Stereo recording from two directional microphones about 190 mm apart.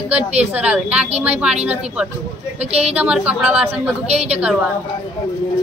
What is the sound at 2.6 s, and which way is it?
Speech, 35° right (ahead or behind).